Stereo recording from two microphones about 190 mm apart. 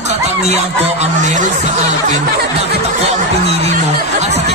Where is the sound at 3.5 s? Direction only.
35° right (ahead or behind).